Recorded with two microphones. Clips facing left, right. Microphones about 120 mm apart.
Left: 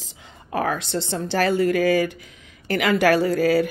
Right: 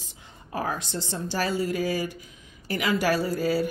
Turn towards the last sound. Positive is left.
turn(degrees=85)